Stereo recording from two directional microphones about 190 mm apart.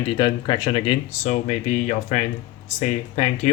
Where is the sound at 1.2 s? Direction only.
40° left (ahead or behind).